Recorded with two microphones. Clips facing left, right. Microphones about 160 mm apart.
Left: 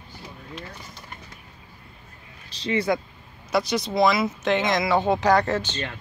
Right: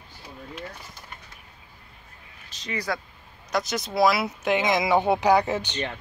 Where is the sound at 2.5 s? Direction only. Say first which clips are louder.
Left 7 dB; 30° left (ahead or behind).